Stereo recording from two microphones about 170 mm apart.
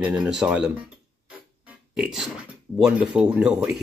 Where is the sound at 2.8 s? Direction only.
5° right (ahead or behind).